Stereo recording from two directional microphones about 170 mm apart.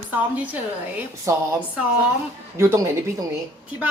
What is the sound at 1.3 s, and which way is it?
Speech, 15° right (ahead or behind).